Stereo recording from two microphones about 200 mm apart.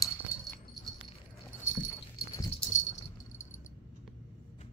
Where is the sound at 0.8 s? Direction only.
Centre (ahead or behind).